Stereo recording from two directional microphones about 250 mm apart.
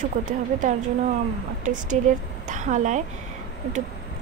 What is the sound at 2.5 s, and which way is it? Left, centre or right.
Speech, right.